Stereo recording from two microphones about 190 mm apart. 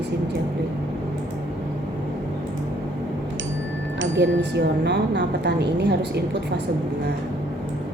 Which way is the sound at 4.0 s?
65° right (ahead or behind).